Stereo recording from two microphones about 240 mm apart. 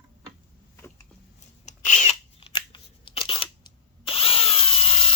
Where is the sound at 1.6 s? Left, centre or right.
Left.